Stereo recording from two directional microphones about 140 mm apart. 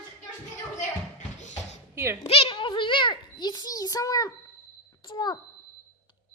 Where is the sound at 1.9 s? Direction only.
20° right (ahead or behind).